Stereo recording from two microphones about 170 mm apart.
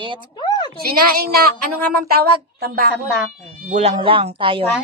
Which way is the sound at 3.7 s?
35° right (ahead or behind).